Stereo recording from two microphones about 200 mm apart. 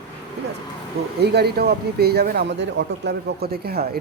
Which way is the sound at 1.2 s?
55° right (ahead or behind).